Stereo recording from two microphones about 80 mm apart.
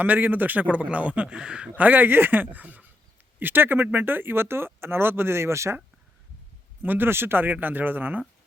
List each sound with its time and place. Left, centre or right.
0.0 s a man's voice: right
6.8 s a man's voice: right